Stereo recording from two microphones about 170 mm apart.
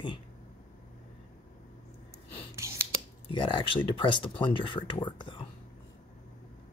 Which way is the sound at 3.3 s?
30° left (ahead or behind).